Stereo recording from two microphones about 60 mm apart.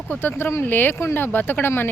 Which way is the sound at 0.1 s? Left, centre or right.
Left.